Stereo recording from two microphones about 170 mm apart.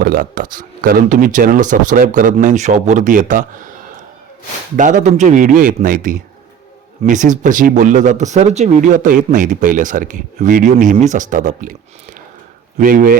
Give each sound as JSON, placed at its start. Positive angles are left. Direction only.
{"t": 0.0, "sound": "speech", "side_deg": -55}
{"t": 12.8, "sound": "speech", "side_deg": -55}